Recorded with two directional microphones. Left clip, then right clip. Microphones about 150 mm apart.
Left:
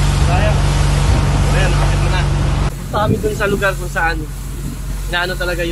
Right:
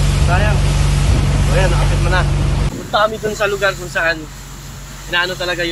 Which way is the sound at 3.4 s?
10° left (ahead or behind).